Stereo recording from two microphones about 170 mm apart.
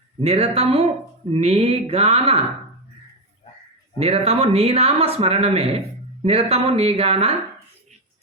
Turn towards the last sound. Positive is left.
turn(degrees=-35)  # may be behind; listen again after turning